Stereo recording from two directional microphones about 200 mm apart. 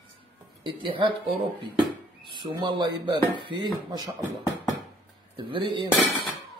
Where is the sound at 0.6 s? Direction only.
25° right (ahead or behind).